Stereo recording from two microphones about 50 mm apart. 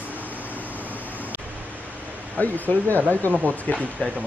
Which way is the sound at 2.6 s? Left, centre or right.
Left.